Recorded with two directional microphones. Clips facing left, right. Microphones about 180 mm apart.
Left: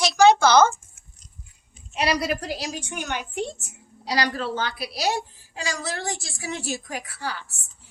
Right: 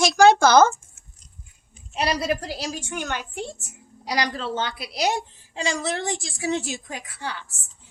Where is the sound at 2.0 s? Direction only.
25° right (ahead or behind).